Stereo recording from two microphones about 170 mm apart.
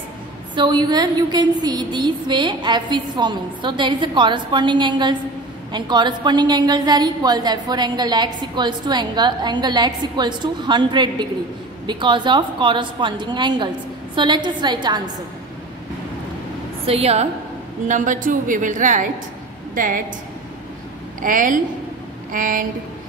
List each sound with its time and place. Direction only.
0.6 s a woman's voice: 25° right (ahead or behind)
16.8 s a woman's voice: 35° right (ahead or behind); by 20.0 s 50° right (ahead or behind)
21.2 s a woman's voice: 50° right (ahead or behind)